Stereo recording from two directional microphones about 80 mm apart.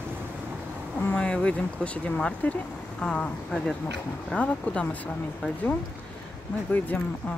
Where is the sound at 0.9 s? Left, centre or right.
Centre.